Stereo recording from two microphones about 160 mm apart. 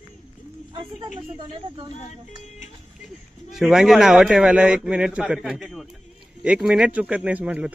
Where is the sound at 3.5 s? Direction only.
5° right (ahead or behind).